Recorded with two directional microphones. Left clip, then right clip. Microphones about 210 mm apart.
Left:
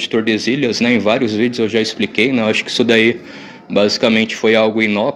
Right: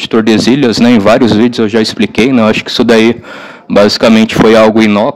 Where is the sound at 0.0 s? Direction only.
45° right (ahead or behind).